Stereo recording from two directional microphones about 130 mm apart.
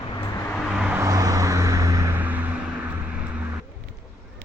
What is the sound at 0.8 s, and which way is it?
Vehicle, 10° right (ahead or behind).